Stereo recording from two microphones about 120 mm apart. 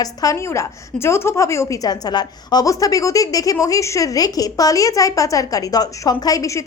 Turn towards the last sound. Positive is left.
turn(degrees=30)  # may be behind; listen again after turning